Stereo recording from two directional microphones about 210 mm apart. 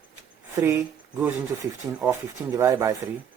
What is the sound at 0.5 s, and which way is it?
Speech, 10° right (ahead or behind).